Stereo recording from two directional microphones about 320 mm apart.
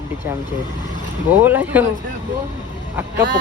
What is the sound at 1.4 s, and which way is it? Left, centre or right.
Speech, centre.